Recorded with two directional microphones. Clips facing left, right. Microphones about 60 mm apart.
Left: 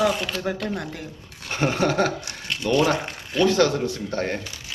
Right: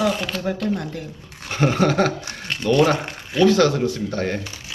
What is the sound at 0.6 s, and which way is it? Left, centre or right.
Speech, centre.